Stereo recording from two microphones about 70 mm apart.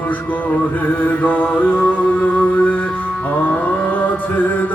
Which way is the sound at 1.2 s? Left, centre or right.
Left.